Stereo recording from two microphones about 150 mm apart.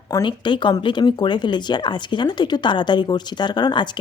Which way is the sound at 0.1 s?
30° left (ahead or behind).